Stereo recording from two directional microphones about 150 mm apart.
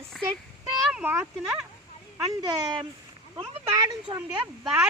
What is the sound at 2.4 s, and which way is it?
Speech, 30° right (ahead or behind).